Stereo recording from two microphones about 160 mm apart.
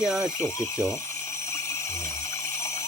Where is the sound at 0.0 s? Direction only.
5° right (ahead or behind).